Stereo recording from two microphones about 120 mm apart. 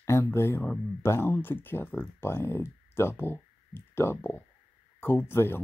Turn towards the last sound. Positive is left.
turn(degrees=20)  # may be behind; listen again after turning